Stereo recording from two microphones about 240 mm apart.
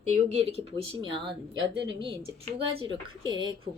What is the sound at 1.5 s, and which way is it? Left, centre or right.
Speech, right.